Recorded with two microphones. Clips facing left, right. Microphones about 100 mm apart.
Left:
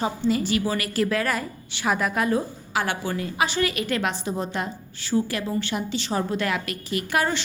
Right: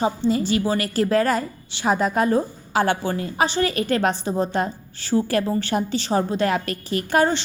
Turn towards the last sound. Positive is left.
turn(degrees=-30)  # may be behind; listen again after turning